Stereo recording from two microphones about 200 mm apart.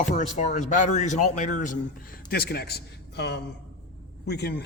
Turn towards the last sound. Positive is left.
turn(degrees=55)  # may be behind; listen again after turning